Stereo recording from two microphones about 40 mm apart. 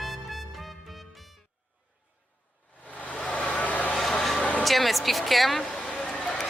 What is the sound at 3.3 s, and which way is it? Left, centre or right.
Vehicle, left.